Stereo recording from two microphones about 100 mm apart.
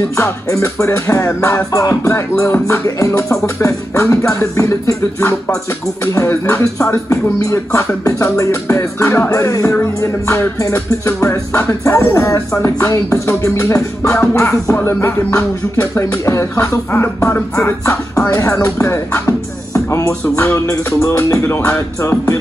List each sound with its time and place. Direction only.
0.1 s music: 30° left (ahead or behind)
6.1 s music: 30° left (ahead or behind)